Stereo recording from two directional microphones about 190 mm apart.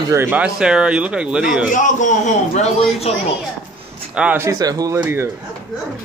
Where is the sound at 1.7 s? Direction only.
40° left (ahead or behind).